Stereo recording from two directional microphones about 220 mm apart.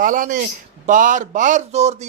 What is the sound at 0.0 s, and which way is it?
A man's voice, 35° right (ahead or behind).